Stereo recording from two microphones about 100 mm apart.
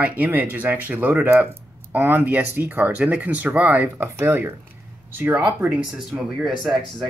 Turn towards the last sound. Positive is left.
turn(degrees=0)  # may be behind; listen again after turning